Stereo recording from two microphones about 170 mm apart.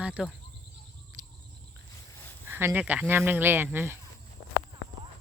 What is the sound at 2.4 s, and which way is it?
Speech, 10° right (ahead or behind).